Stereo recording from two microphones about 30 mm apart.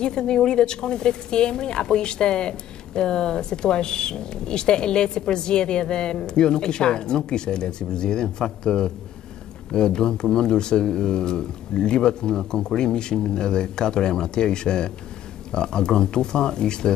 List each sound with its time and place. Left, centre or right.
0.0 s speech: left